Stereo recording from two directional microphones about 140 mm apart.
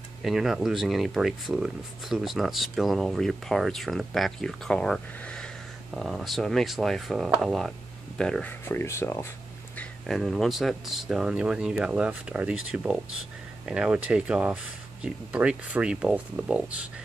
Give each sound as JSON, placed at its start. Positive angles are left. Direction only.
{"t": 0.2, "sound": "speech", "side_deg": 0}
{"t": 9.8, "sound": "speech", "side_deg": 0}